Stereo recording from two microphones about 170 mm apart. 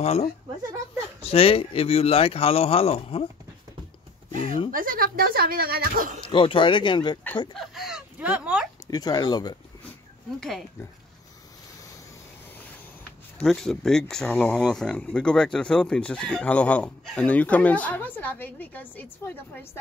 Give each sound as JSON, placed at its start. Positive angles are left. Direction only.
{"t": 0.0, "sound": "speech", "side_deg": 40}
{"t": 4.6, "sound": "speech", "side_deg": -55}
{"t": 6.2, "sound": "speech", "side_deg": 30}
{"t": 7.5, "sound": "speech", "side_deg": 0}
{"t": 8.9, "sound": "speech", "side_deg": 25}
{"t": 13.4, "sound": "speech", "side_deg": 5}